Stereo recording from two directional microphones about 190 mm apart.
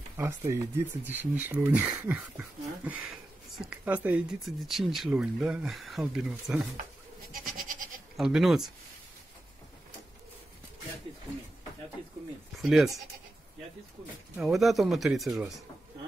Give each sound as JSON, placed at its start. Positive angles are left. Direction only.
{"t": 0.2, "sound": "speech", "side_deg": -15}
{"t": 7.5, "sound": "goat", "side_deg": -45}
{"t": 8.2, "sound": "speech", "side_deg": 0}
{"t": 12.5, "sound": "speech", "side_deg": 0}
{"t": 14.3, "sound": "speech", "side_deg": -5}